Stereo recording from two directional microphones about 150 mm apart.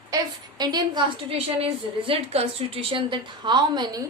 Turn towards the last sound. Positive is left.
turn(degrees=-30)  # may be behind; listen again after turning